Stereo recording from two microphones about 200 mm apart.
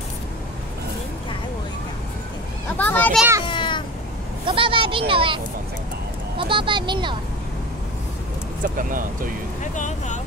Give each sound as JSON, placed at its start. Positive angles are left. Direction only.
{"t": 2.8, "sound": "a child's voice", "side_deg": 10}
{"t": 3.4, "sound": "meow", "side_deg": 25}
{"t": 4.5, "sound": "a sound", "side_deg": -25}
{"t": 6.3, "sound": "speech", "side_deg": -25}
{"t": 8.7, "sound": "speech", "side_deg": -45}
{"t": 9.6, "sound": "speech", "side_deg": 35}